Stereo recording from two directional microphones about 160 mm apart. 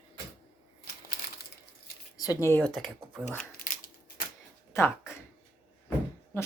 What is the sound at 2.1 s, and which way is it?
Speech, 25° left (ahead or behind).